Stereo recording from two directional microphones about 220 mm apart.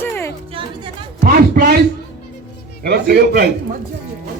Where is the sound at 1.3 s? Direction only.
40° right (ahead or behind).